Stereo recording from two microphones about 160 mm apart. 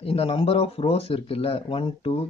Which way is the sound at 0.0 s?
35° left (ahead or behind).